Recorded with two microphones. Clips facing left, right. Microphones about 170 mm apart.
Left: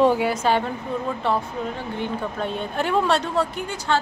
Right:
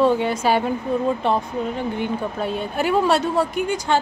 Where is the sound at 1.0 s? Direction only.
20° right (ahead or behind).